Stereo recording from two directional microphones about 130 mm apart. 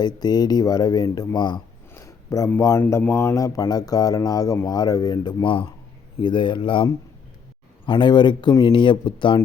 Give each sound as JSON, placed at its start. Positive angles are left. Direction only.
{"t": 0.0, "sound": "speech", "side_deg": 30}
{"t": 1.9, "sound": "a sound", "side_deg": 25}
{"t": 2.6, "sound": "speech", "side_deg": 25}
{"t": 7.9, "sound": "speech", "side_deg": 35}